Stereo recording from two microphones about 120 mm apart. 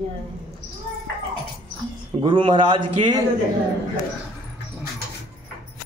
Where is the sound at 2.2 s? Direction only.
45° right (ahead or behind).